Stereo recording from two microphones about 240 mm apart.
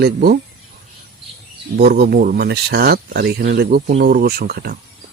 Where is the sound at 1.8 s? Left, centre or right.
Right.